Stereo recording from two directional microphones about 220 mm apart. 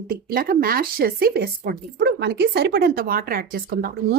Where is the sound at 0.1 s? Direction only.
40° right (ahead or behind).